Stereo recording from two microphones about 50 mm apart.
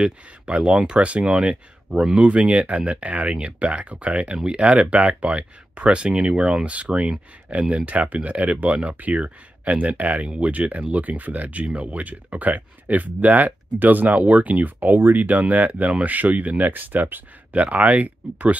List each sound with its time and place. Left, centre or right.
0.0 s speech: centre